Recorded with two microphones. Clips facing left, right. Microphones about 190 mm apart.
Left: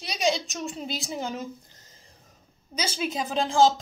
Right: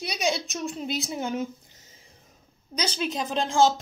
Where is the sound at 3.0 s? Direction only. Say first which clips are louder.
Left 1 dB; centre (ahead or behind).